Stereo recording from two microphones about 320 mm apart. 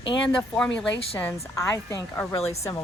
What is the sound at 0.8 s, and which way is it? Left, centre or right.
A woman's voice, centre.